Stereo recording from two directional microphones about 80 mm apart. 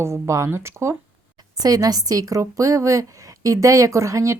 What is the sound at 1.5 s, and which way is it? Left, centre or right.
A woman's voice, right.